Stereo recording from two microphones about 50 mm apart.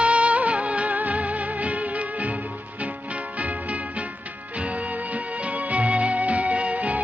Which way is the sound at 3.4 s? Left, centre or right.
Right.